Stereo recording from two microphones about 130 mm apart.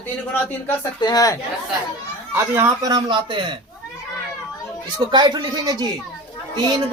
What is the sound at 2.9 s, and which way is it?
Speech, 35° right (ahead or behind).